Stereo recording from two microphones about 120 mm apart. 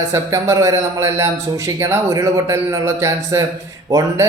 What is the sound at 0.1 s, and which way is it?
Speech, 25° right (ahead or behind).